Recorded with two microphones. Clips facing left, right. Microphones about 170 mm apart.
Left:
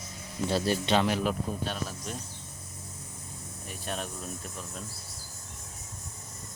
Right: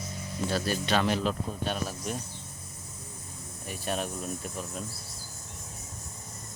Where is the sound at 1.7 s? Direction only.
5° right (ahead or behind).